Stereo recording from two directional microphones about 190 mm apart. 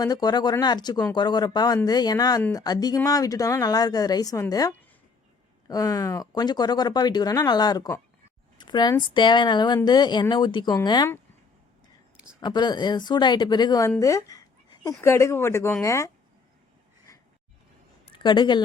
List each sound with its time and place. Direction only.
0.0 s speech: 20° left (ahead or behind)
12.1 s a sound: 5° right (ahead or behind)
12.4 s speech: 20° left (ahead or behind)
13.9 s a sound: 15° left (ahead or behind)
15.0 s speech: 15° left (ahead or behind)
18.1 s a woman's voice: 25° left (ahead or behind)